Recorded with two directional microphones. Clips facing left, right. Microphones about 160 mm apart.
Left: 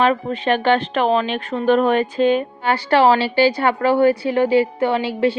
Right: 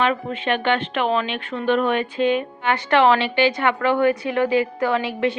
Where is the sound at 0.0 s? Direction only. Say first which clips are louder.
Left 4 dB; 40° left (ahead or behind).